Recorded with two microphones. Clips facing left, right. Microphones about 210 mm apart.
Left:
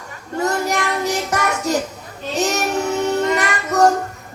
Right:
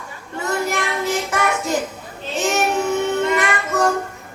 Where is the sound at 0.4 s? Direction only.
40° left (ahead or behind).